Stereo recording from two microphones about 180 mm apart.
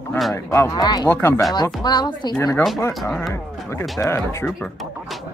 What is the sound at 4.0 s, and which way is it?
Speech, 15° left (ahead or behind).